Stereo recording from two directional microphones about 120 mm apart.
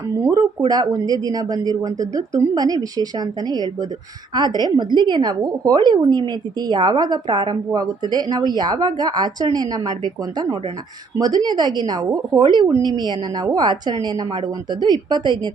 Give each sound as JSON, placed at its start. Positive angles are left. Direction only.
{"t": 0.2, "sound": "a woman's voice", "side_deg": -30}